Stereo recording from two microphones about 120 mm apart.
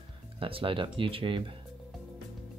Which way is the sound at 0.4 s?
45° right (ahead or behind).